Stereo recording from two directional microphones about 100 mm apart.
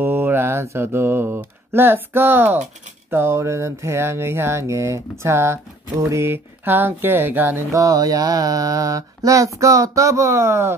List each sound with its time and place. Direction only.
0.0 s mantra: 20° right (ahead or behind)
3.1 s speech: 25° right (ahead or behind)
7.8 s mantra: 35° right (ahead or behind)